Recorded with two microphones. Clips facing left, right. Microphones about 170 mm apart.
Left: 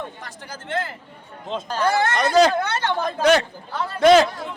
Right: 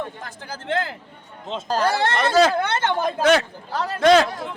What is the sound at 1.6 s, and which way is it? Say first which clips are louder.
Speech: even; 35° right (ahead or behind).